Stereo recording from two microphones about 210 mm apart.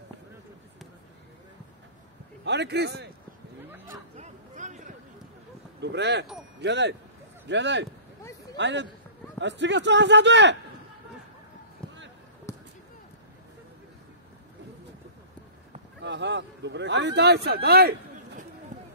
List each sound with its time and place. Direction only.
2.4 s a man's voice: 55° right (ahead or behind)
4.2 s a sound: 35° right (ahead or behind)
5.8 s a man's voice: 55° right (ahead or behind)
12.5 s basketball bounce: 15° left (ahead or behind)
16.0 s a man's voice: 55° right (ahead or behind)